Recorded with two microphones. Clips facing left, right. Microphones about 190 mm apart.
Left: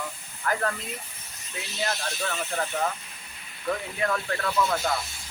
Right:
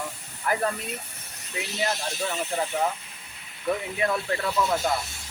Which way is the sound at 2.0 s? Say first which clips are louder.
Right 2 dB; 15° right (ahead or behind).